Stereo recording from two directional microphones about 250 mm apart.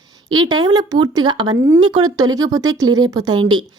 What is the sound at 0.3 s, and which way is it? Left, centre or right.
Speech, centre.